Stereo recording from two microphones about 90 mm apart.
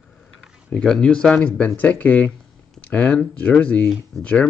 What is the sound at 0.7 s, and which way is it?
Speech, 10° left (ahead or behind).